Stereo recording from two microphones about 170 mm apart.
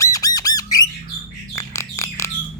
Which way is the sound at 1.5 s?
20° left (ahead or behind).